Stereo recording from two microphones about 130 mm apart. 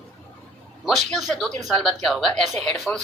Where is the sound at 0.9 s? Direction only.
Centre (ahead or behind).